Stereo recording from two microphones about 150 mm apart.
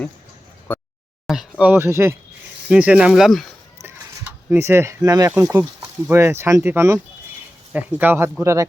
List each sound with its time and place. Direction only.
0.7 s a sound: 10° left (ahead or behind)
1.3 s speech: 5° right (ahead or behind)
4.4 s speech: 15° right (ahead or behind)